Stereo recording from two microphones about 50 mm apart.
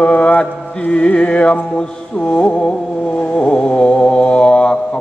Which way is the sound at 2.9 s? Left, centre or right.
Left.